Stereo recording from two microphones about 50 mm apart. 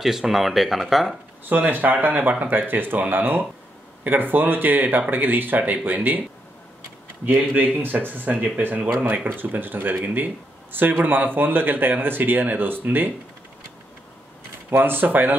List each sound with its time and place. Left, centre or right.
0.0 s speech: centre
1.5 s speech: right
7.5 s speech: right
14.7 s speech: right